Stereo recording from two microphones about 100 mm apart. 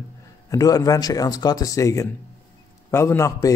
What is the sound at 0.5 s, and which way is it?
A man's voice, 35° left (ahead or behind).